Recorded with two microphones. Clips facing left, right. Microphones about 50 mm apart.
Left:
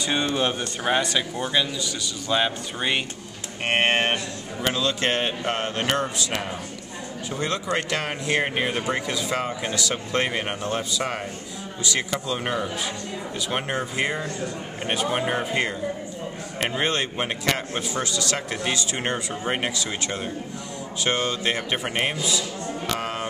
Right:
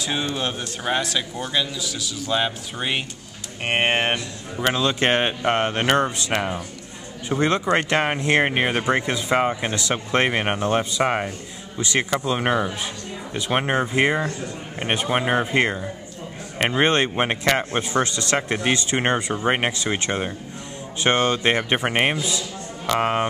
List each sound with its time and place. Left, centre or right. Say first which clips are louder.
0.0 s a man's voice: left 2 dB; centre; by 23.2 s right